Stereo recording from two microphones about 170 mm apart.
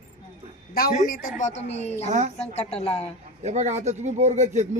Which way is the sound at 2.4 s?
40° left (ahead or behind).